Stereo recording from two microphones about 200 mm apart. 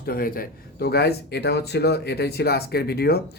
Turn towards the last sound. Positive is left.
turn(degrees=50)  # may be behind; listen again after turning